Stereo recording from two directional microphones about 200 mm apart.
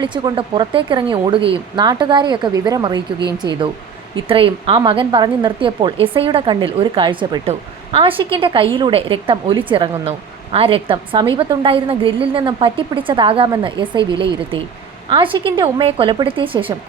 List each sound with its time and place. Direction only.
0.0 s a woman's voice: 25° right (ahead or behind)
15.1 s a woman's voice: 25° right (ahead or behind)